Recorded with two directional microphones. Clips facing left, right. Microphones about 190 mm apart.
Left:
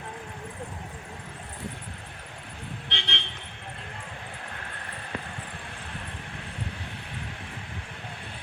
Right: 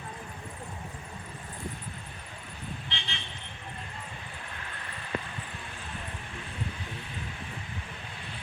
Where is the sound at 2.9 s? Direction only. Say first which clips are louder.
Left 4 dB; 70° left (ahead or behind).